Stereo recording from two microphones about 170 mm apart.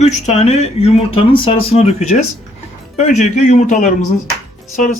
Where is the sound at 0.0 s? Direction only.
40° left (ahead or behind).